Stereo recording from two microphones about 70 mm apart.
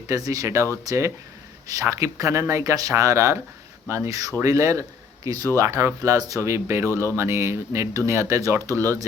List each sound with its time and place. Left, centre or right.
0.1 s a man's voice: right
6.9 s speech: left
7.2 s speech: right